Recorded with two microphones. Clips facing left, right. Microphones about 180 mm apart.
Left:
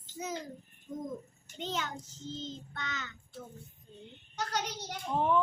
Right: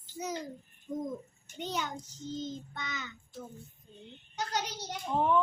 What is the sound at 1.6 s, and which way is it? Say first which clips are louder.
Child singing: right 1 dB; 15° right (ahead or behind).